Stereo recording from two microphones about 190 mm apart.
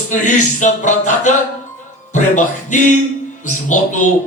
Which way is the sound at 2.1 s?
40° left (ahead or behind).